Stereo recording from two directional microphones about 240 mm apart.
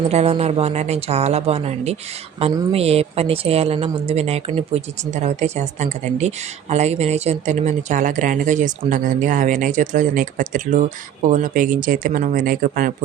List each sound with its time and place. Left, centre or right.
0.1 s speech: right